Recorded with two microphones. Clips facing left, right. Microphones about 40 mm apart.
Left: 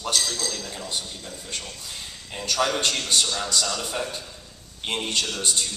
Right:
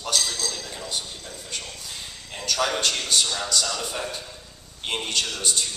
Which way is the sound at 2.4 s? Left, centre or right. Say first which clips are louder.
Left 1 dB; centre.